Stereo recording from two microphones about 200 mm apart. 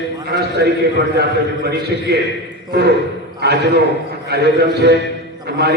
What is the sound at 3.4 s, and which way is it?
A man's voice, 55° right (ahead or behind).